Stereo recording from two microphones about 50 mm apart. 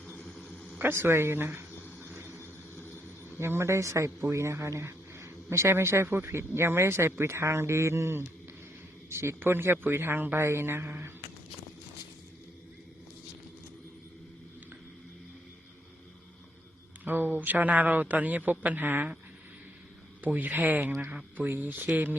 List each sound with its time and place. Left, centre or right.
0.8 s a woman's voice: right
1.8 s a sound: right
2.1 s vehicle: right
2.4 s vehicle: left
3.3 s a man's voice: right
9.4 s a woman's voice: right
10.3 s a woman's voice: right
17.0 s a man's voice: right
20.2 s a man's voice: right